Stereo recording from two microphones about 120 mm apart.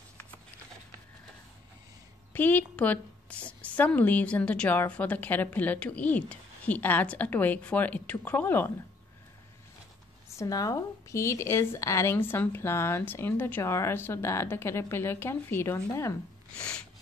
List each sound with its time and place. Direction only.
2.3 s a woman's voice: 15° left (ahead or behind)
10.3 s a woman's voice: 30° left (ahead or behind)
16.5 s a woman's voice: 10° left (ahead or behind)